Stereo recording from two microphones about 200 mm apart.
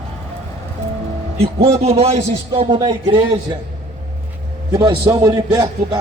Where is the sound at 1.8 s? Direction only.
30° right (ahead or behind).